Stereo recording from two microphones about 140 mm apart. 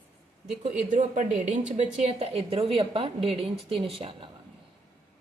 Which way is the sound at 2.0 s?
50° right (ahead or behind).